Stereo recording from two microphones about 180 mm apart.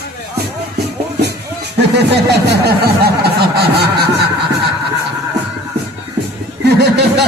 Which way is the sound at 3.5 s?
65° right (ahead or behind).